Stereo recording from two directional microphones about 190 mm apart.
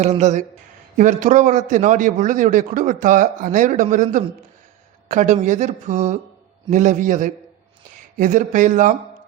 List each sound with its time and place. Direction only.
0.0 s a man's voice: 35° right (ahead or behind)